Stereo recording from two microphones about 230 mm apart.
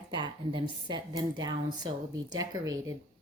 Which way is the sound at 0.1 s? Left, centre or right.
Right.